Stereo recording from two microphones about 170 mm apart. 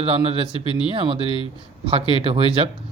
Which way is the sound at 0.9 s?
30° right (ahead or behind).